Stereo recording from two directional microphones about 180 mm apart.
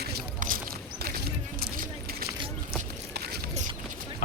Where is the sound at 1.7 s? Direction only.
55° right (ahead or behind).